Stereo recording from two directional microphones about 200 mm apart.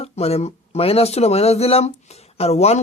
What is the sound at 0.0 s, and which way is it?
Speech, 30° left (ahead or behind).